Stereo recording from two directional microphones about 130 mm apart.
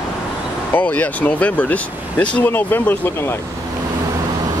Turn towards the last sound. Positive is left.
turn(degrees=20)  # may be behind; listen again after turning